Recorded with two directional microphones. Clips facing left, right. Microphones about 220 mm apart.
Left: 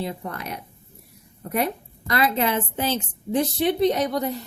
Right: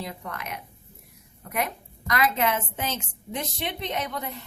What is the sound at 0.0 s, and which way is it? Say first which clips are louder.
A woman's voice: left 5 dB; 30° left (ahead or behind).